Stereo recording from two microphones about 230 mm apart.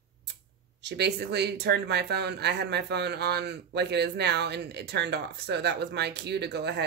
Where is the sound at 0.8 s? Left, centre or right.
Right.